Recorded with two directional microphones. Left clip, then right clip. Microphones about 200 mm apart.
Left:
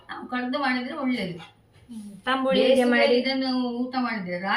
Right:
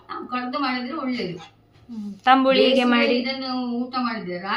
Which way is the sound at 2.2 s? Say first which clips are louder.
Right 6 dB; 45° right (ahead or behind).